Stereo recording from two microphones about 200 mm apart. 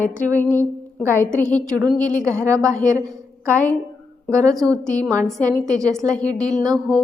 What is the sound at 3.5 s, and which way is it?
A woman's voice, 5° left (ahead or behind).